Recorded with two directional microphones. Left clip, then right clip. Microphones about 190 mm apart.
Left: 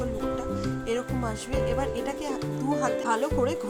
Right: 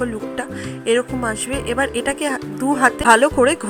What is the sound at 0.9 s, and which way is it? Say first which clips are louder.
Speech: right 14 dB; 15° right (ahead or behind).